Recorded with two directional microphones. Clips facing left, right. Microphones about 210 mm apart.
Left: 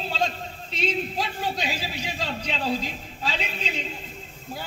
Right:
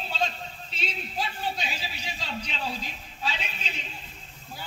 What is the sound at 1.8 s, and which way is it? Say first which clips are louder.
Speech: left 7 dB; 50° left (ahead or behind).